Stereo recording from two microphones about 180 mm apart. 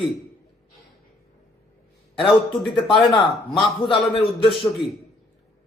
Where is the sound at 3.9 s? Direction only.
30° left (ahead or behind).